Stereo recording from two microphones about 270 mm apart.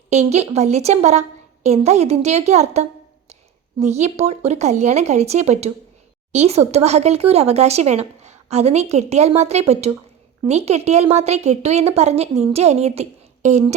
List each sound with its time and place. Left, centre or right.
0.1 s speech: right